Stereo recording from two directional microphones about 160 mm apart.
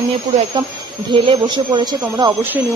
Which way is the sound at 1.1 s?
30° right (ahead or behind).